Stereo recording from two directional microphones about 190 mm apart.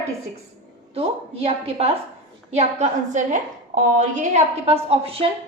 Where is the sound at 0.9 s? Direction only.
30° right (ahead or behind).